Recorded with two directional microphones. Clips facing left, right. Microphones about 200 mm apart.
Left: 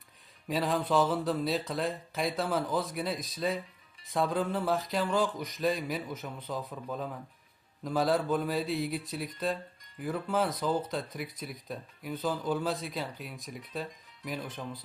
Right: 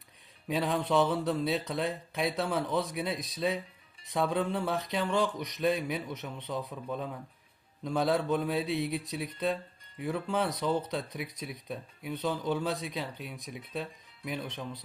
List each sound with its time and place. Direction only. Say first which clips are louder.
0.4 s speech: even; centre (ahead or behind)